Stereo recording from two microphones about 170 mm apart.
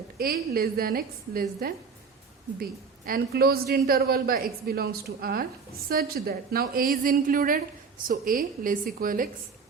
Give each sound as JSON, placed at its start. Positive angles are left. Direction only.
{"t": 0.2, "sound": "a woman's voice", "side_deg": -60}
{"t": 3.1, "sound": "a woman's voice", "side_deg": -65}